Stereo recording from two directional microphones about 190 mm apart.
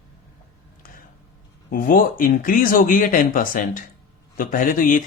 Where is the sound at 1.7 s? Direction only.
50° left (ahead or behind).